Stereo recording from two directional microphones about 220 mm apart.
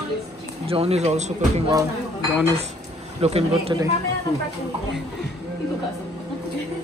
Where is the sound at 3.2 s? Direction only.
25° right (ahead or behind).